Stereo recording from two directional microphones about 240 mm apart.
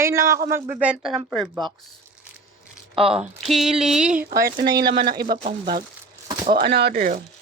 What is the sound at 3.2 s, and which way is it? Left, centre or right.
Speech, centre.